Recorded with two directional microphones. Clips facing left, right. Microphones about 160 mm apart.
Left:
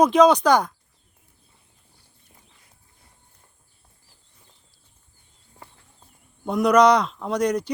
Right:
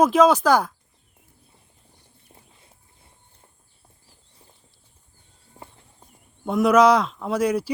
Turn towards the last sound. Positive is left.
turn(degrees=-5)  # may be behind; listen again after turning